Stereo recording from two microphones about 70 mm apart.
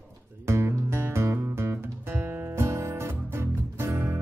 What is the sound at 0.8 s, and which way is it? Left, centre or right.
Music, right.